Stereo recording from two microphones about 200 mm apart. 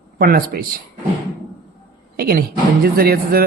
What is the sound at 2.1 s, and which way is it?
A woman's voice, 50° right (ahead or behind).